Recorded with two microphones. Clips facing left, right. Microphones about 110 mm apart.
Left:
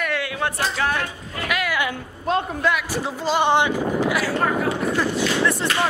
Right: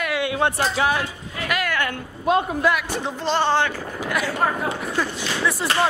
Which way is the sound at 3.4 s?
15° left (ahead or behind).